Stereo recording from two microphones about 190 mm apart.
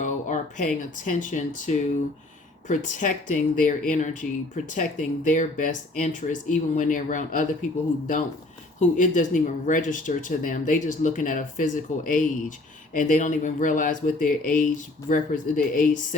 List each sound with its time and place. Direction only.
0.0 s speech: 40° left (ahead or behind)
8.8 s speech: 40° left (ahead or behind)